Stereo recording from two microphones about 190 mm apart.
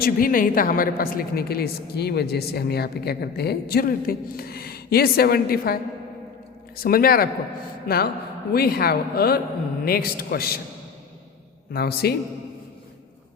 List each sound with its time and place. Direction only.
0.0 s a woman's voice: 50° left (ahead or behind)
11.7 s a woman's voice: 55° left (ahead or behind)